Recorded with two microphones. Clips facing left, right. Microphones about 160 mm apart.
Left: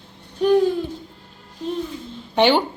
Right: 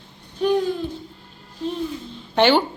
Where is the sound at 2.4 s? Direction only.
15° left (ahead or behind).